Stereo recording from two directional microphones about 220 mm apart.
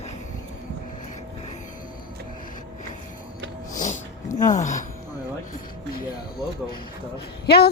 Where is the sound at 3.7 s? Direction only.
35° left (ahead or behind).